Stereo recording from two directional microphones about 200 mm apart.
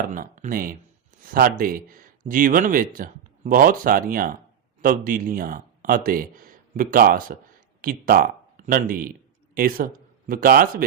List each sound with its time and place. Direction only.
0.1 s speech: 40° right (ahead or behind)